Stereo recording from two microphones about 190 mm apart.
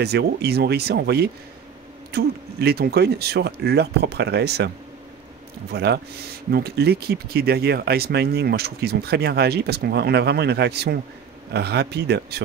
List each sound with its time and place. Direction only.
0.0 s speech: 60° right (ahead or behind)